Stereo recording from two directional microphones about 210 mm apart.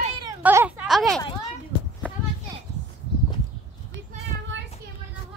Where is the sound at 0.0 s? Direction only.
25° right (ahead or behind).